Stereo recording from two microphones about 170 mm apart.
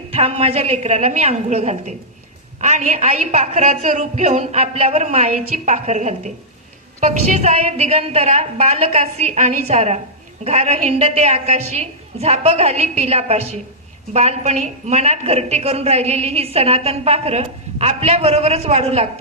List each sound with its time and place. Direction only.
0.1 s a woman's voice: 35° right (ahead or behind)